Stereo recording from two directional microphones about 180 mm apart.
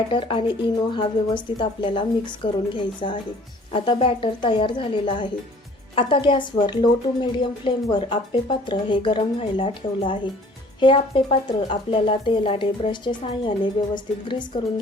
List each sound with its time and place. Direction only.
0.1 s a woman's voice: 30° left (ahead or behind)